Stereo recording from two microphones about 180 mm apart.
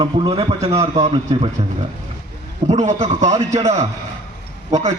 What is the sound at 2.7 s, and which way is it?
Speech, 40° right (ahead or behind).